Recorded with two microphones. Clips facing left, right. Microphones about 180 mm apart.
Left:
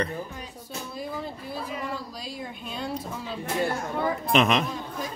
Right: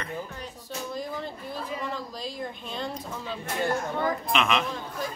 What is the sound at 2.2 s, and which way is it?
Speech, 5° left (ahead or behind).